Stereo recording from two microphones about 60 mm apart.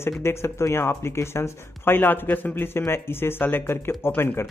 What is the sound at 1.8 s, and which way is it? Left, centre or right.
A man's voice, left.